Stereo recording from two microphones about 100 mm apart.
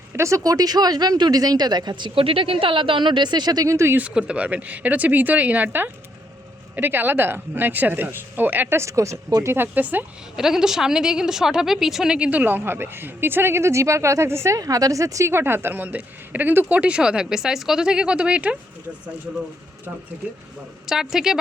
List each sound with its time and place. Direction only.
0.1 s speech: 30° right (ahead or behind)
3.9 s a woman's voice: 10° right (ahead or behind)
10.3 s a woman's voice: 5° right (ahead or behind)
20.8 s a woman's voice: 5° right (ahead or behind)